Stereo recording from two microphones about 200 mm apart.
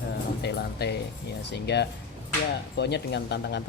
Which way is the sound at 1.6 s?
55° left (ahead or behind).